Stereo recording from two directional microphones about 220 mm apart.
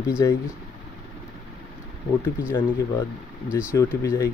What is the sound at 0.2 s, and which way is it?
Speech, 15° left (ahead or behind).